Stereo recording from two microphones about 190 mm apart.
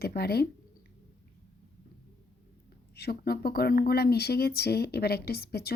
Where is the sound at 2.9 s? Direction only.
55° left (ahead or behind).